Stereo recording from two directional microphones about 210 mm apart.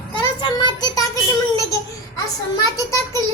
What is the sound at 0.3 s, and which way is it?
Child singing, 20° left (ahead or behind).